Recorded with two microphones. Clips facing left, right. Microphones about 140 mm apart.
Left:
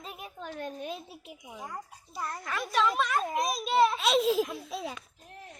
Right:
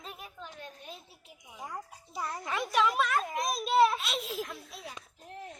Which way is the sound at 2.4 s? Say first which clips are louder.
Right 1 dB; 20° right (ahead or behind).